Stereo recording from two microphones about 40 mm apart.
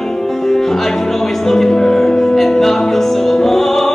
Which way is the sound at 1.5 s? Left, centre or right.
Centre.